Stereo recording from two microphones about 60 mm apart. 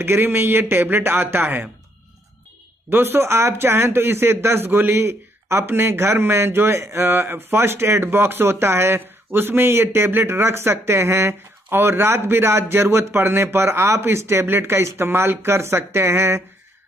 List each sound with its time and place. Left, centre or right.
0.0 s a man's voice: right
2.9 s a man's voice: right